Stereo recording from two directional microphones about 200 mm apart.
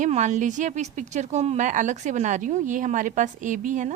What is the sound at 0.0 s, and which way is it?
A woman's voice, 35° right (ahead or behind).